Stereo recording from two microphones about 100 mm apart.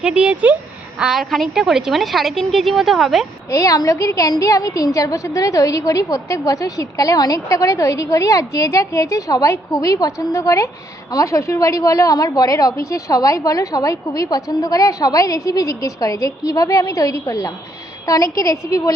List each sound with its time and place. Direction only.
0.0 s a woman's voice: 10° right (ahead or behind)
3.5 s a woman's voice: 35° left (ahead or behind)